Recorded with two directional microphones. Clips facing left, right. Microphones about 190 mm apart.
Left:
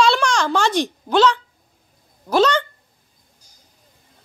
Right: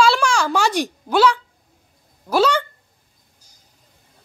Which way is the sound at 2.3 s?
5° right (ahead or behind).